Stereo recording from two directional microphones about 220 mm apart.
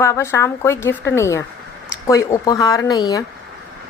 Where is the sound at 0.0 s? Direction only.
15° left (ahead or behind).